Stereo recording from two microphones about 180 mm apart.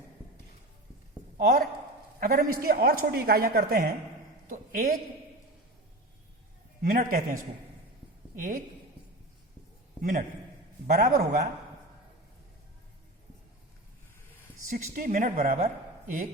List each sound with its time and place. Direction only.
2.2 s a man's voice: 55° right (ahead or behind)
6.8 s a woman's voice: 50° right (ahead or behind)
8.4 s a woman's voice: 50° right (ahead or behind)
10.0 s a woman's voice: 50° right (ahead or behind)
14.7 s a woman's voice: 50° right (ahead or behind)